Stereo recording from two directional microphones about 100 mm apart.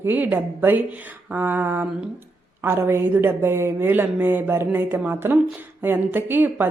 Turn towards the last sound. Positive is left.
turn(degrees=-20)  # may be behind; listen again after turning